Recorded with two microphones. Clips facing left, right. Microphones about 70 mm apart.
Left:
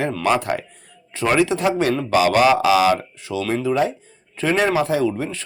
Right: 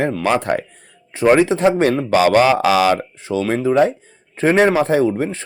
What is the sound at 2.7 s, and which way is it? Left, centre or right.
Speech, right.